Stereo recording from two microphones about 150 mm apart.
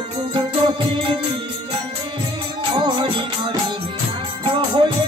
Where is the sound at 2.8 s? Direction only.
30° right (ahead or behind).